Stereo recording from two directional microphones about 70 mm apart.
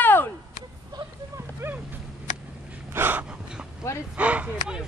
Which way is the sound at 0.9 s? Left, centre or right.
Right.